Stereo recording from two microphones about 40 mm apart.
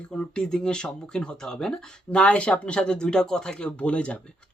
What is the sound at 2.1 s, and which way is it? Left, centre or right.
Speech, left.